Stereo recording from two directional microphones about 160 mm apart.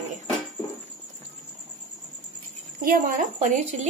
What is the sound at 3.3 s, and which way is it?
Speech, 45° right (ahead or behind).